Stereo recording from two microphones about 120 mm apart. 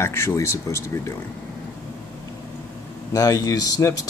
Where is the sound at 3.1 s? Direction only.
30° left (ahead or behind).